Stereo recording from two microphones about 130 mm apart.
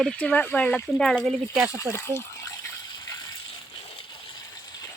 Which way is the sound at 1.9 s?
20° left (ahead or behind).